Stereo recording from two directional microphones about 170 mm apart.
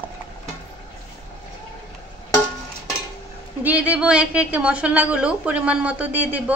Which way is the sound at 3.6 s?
10° right (ahead or behind).